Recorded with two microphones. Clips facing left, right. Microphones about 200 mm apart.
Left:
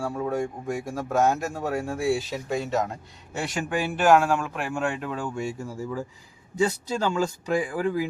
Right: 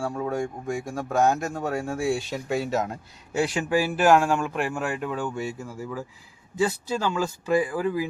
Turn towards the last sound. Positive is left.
turn(degrees=20)  # may be behind; listen again after turning